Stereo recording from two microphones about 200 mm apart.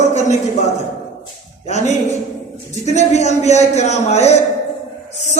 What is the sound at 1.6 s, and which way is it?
Speech, 35° left (ahead or behind).